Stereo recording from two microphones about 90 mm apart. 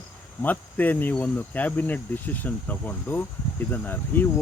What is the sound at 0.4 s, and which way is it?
Speech, 20° left (ahead or behind).